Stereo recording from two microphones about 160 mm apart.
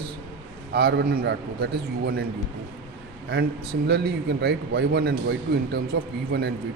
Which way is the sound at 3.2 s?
90° right.